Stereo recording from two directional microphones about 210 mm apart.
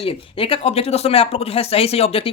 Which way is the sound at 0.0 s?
25° left (ahead or behind).